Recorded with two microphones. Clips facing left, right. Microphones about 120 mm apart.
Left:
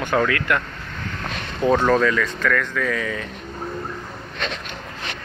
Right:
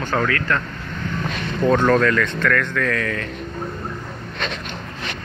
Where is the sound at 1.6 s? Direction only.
5° left (ahead or behind).